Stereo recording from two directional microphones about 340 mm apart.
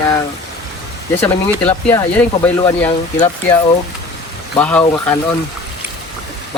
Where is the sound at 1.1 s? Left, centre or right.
Centre.